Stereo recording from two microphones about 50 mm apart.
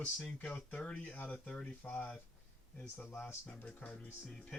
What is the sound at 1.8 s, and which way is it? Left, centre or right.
Speech, left.